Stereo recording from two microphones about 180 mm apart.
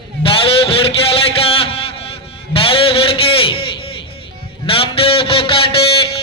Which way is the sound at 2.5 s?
30° left (ahead or behind).